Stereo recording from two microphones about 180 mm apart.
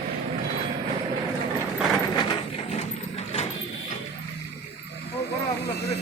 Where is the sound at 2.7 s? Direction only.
35° left (ahead or behind).